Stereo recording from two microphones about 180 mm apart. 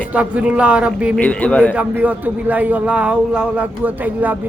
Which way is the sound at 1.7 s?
10° right (ahead or behind).